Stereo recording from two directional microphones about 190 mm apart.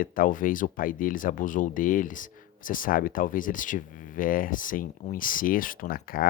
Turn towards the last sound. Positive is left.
turn(degrees=50)  # may be behind; listen again after turning